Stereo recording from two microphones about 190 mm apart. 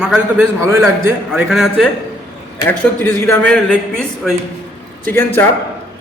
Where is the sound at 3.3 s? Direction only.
5° left (ahead or behind).